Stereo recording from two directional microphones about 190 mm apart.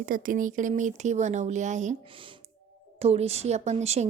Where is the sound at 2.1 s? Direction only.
25° right (ahead or behind).